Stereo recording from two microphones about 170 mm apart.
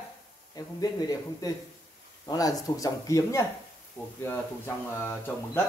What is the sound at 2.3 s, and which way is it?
Speech, 20° left (ahead or behind).